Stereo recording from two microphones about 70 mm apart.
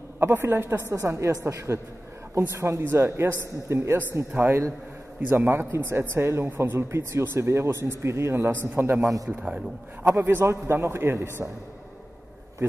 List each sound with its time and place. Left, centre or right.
0.2 s speech: right
9.0 s a man's voice: right
9.3 s a man's voice: centre
10.4 s speech: right